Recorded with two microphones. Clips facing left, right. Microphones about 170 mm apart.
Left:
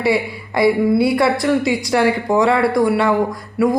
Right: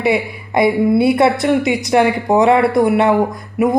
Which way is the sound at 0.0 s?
20° right (ahead or behind).